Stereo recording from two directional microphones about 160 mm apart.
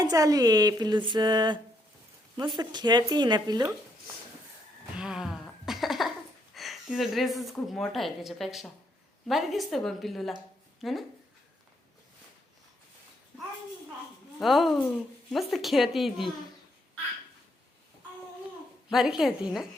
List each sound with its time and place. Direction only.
0.0 s speech: 25° right (ahead or behind)
4.9 s cough: 5° right (ahead or behind)
6.5 s a woman's voice: centre (ahead or behind)
14.3 s a woman's voice: centre (ahead or behind)
18.9 s a woman's voice: centre (ahead or behind)